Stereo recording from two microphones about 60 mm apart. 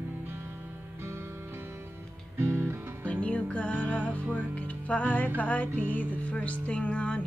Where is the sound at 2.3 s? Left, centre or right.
Right.